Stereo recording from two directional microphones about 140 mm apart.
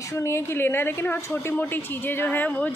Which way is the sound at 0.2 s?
15° left (ahead or behind).